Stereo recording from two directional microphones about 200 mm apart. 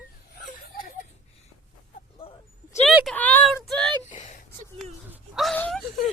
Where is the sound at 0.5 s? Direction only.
45° left (ahead or behind).